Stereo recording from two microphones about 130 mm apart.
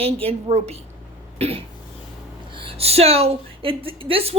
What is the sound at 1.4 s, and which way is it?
Cough, 50° right (ahead or behind).